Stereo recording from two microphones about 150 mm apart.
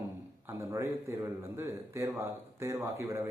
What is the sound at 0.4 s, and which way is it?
A man's voice, 20° right (ahead or behind).